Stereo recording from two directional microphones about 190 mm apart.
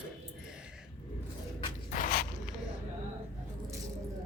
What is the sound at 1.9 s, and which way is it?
Scrape, 50° left (ahead or behind).